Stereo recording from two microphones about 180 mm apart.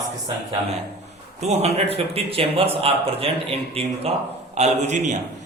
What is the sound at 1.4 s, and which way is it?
A man's voice, 35° right (ahead or behind).